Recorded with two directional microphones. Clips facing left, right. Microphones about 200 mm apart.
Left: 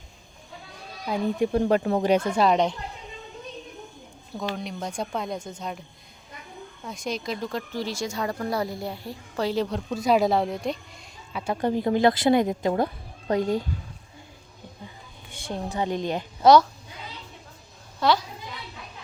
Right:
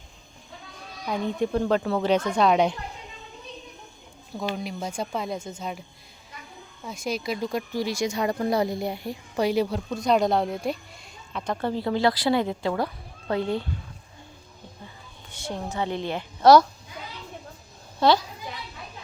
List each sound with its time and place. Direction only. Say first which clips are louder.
1.0 s speech: left 2 dB; 10° left (ahead or behind)
4.5 s speech: right 1 dB; centre (ahead or behind)
6.8 s speech: right 2 dB; 5° right (ahead or behind)
11.3 s speech: left 2 dB; 10° left (ahead or behind)
15.3 s music: right 1 dB; 15° left (ahead or behind)
15.8 s speech: left 2 dB; 15° left (ahead or behind)
16.4 s speech: right 1 dB; 5° right (ahead or behind)